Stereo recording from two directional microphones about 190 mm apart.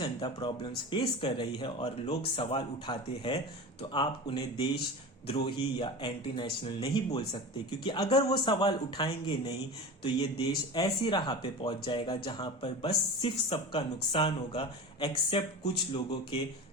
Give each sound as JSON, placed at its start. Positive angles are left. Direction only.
{"t": 0.0, "sound": "speech", "side_deg": 25}